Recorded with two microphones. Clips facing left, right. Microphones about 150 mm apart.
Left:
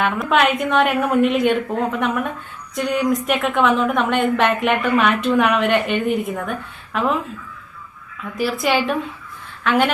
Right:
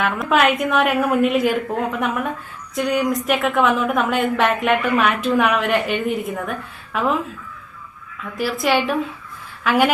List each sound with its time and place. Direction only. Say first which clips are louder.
0.0 s a woman's voice: even; centre (ahead or behind)
8.4 s a woman's voice: even; centre (ahead or behind)